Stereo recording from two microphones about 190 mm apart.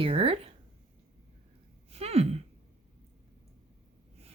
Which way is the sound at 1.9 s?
30° right (ahead or behind).